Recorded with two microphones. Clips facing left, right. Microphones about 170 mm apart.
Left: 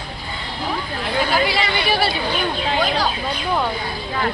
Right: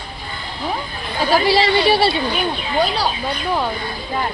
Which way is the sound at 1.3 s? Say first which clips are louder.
Right 10 dB; 35° right (ahead or behind).